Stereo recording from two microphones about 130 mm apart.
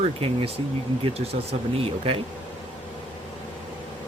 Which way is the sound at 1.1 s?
50° right (ahead or behind).